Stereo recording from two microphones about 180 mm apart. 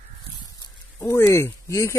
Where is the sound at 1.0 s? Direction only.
15° left (ahead or behind).